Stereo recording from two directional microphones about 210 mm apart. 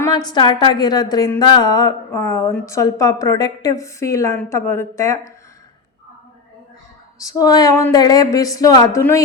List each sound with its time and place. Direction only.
0.0 s a woman's voice: 20° left (ahead or behind)
7.2 s a woman's voice: 15° left (ahead or behind)